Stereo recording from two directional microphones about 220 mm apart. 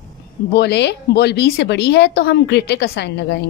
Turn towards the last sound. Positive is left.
turn(degrees=50)  # may be behind; listen again after turning